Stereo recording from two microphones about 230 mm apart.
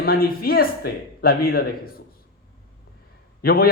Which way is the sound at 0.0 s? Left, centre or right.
Left.